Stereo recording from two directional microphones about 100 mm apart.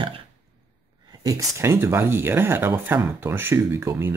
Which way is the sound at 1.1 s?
35° right (ahead or behind).